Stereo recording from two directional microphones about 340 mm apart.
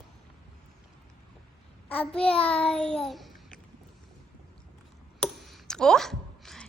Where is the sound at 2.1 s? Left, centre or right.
Centre.